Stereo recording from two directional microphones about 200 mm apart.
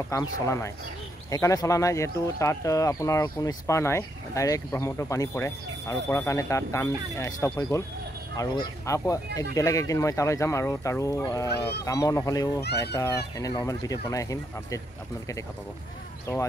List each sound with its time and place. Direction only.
1.3 s speech: 20° left (ahead or behind)
11.5 s goose: 55° left (ahead or behind)
11.8 s speech: 15° left (ahead or behind)
12.6 s a child's voice: 55° left (ahead or behind)
13.4 s speech: 20° left (ahead or behind)